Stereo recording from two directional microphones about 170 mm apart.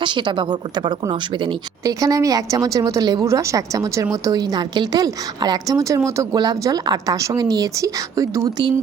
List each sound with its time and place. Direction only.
0.0 s a woman's voice: 30° right (ahead or behind)